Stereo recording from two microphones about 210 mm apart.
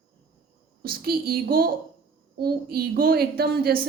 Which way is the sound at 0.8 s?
45° right (ahead or behind).